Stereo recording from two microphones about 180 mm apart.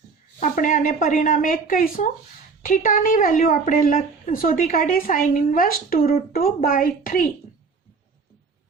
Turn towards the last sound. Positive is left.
turn(degrees=50)  # may be behind; listen again after turning